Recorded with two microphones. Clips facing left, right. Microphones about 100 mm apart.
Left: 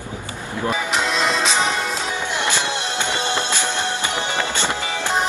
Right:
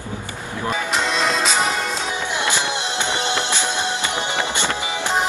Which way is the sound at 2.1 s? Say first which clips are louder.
Even; 15° right (ahead or behind).